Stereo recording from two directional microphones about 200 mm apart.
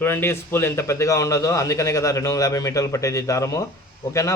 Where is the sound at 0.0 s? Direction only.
10° left (ahead or behind).